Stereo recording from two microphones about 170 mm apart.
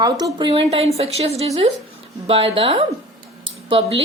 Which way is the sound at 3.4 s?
35° right (ahead or behind).